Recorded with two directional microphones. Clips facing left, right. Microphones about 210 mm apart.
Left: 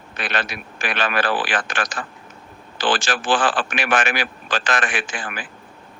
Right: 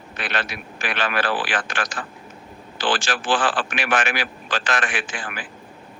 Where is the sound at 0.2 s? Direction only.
45° left (ahead or behind).